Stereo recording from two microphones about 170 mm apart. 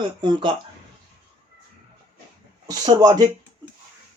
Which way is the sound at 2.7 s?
20° right (ahead or behind).